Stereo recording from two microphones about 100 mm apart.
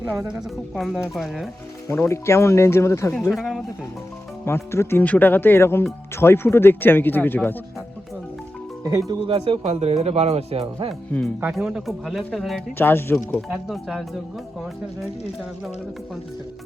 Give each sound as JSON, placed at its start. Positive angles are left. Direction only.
{"t": 0.3, "sound": "speech", "side_deg": -5}
{"t": 1.9, "sound": "speech", "side_deg": 30}
{"t": 3.3, "sound": "speech", "side_deg": 0}
{"t": 4.4, "sound": "speech", "side_deg": 25}
{"t": 8.8, "sound": "speech", "side_deg": -40}
{"t": 9.2, "sound": "speech", "side_deg": -65}
{"t": 11.5, "sound": "speech", "side_deg": -5}
{"t": 12.7, "sound": "speech", "side_deg": 25}
{"t": 13.5, "sound": "speech", "side_deg": -5}